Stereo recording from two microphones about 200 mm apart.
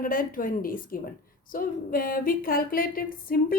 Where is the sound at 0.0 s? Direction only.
45° left (ahead or behind).